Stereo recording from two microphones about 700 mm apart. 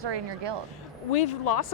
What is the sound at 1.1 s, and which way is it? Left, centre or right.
Speech, left.